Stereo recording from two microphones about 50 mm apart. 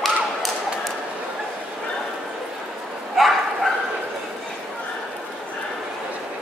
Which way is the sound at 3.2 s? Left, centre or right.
Centre.